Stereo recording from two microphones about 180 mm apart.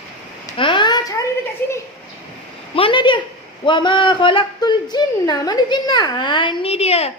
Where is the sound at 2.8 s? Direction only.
30° left (ahead or behind).